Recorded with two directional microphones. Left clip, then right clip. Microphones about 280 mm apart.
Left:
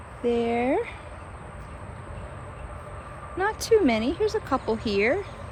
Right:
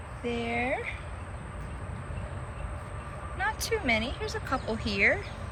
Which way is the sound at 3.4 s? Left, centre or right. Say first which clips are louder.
Left 9 dB; centre.